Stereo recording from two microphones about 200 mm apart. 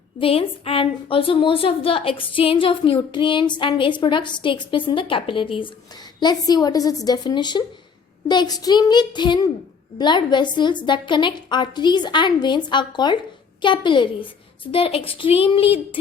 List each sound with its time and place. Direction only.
0.2 s a woman's voice: 30° left (ahead or behind)